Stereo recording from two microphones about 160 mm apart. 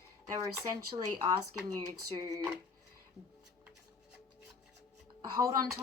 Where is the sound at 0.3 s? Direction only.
25° right (ahead or behind).